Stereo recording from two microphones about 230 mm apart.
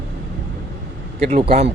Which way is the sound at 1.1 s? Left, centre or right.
Right.